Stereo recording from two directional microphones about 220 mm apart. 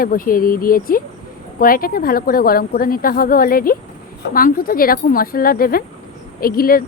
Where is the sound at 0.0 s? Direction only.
40° left (ahead or behind).